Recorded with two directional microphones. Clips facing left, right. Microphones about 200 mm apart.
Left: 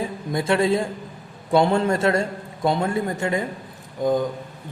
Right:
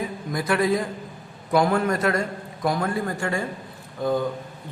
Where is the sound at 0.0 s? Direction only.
25° left (ahead or behind).